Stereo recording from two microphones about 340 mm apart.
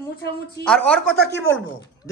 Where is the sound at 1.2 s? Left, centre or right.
Left.